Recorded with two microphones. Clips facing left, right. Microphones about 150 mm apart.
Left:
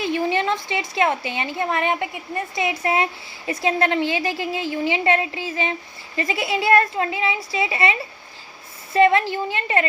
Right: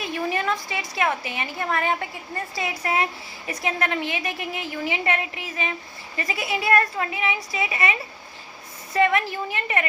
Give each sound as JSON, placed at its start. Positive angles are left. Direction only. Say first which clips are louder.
{"t": 0.0, "sound": "a woman's voice", "louder": "left 5 dB", "side_deg": 25}